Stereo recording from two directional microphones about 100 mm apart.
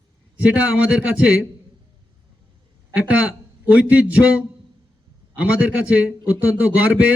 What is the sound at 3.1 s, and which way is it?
A man's voice, 15° right (ahead or behind).